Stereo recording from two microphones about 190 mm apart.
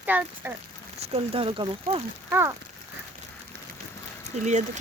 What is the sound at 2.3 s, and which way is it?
Speech, 10° right (ahead or behind).